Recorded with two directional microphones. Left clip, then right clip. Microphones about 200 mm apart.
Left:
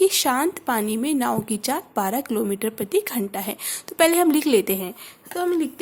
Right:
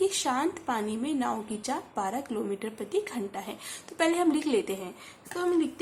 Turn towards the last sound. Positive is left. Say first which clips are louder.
# left 4 dB
turn(degrees=45)  # may be behind; listen again after turning